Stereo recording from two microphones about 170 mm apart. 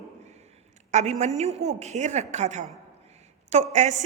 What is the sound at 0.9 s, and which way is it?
A woman's voice, 40° right (ahead or behind).